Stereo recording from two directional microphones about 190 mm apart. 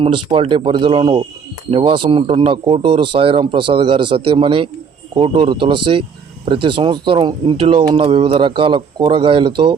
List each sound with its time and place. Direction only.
0.0 s speech: 25° right (ahead or behind)